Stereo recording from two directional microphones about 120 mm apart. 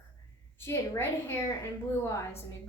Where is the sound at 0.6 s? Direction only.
20° left (ahead or behind).